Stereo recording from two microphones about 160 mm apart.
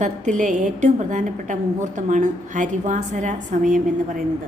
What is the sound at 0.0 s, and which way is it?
A woman's voice, 50° right (ahead or behind).